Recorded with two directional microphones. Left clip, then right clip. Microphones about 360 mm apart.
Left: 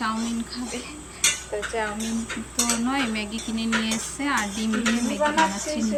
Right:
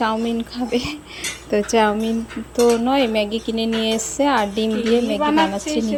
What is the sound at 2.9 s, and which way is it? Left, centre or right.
Speech, centre.